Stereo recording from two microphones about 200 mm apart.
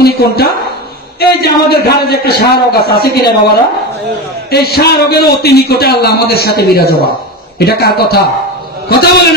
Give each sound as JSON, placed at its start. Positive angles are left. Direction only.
{"t": 0.0, "sound": "a sound", "side_deg": 50}
{"t": 1.2, "sound": "a man's voice", "side_deg": 50}
{"t": 4.5, "sound": "a man's voice", "side_deg": 50}